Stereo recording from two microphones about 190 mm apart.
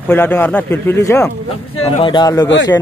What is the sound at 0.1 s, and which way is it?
A man's voice, 10° left (ahead or behind).